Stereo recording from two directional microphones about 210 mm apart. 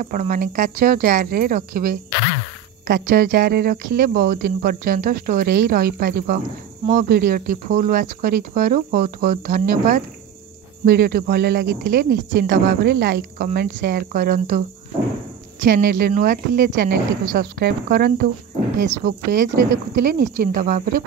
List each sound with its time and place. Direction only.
0.0 s speech: 40° right (ahead or behind)
15.6 s speech: 45° right (ahead or behind)